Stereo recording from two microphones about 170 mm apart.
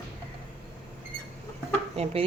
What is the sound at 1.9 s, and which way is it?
Dishes, 35° right (ahead or behind).